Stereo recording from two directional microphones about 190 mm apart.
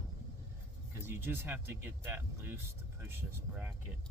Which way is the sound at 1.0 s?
10° right (ahead or behind).